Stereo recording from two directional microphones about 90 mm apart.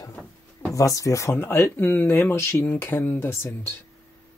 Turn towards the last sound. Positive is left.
turn(degrees=25)  # may be behind; listen again after turning